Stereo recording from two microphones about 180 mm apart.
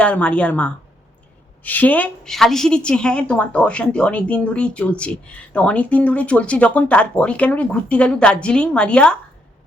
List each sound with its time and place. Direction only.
0.0 s a woman's voice: 5° left (ahead or behind)